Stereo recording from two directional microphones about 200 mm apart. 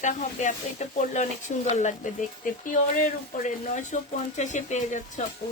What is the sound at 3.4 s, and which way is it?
Speech, 40° left (ahead or behind).